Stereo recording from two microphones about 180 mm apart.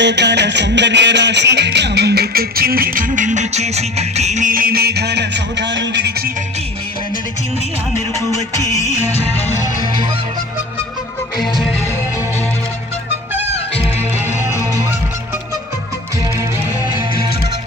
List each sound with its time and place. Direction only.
0.0 s music: 75° right (ahead or behind)
8.8 s music: 40° left (ahead or behind)
11.3 s music: centre (ahead or behind)
14.5 s music: 15° right (ahead or behind)